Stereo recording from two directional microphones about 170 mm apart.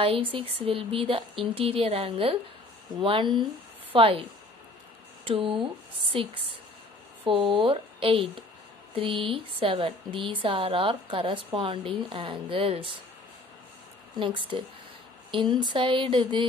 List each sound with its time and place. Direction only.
0.3 s a woman's voice: 35° right (ahead or behind)
14.5 s a woman's voice: 30° right (ahead or behind)